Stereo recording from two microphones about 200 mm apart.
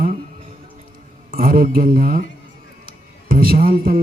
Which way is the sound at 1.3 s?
45° right (ahead or behind).